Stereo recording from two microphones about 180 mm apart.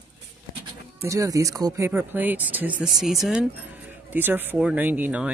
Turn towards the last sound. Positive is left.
turn(degrees=-10)  # may be behind; listen again after turning